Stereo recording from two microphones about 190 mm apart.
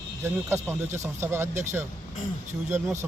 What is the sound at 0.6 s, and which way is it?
Speech, 15° right (ahead or behind).